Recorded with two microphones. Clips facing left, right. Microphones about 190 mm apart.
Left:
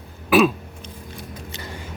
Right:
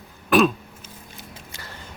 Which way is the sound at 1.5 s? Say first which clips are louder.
Left 6 dB; 20° left (ahead or behind).